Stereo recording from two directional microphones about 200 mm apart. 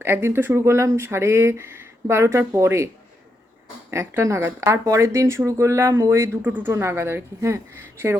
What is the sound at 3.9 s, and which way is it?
Speech, 15° right (ahead or behind).